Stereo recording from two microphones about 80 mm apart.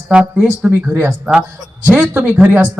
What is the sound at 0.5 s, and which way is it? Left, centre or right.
Speech, right.